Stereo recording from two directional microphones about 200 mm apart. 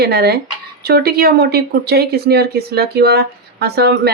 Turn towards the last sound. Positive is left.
turn(degrees=-55)  # may be behind; listen again after turning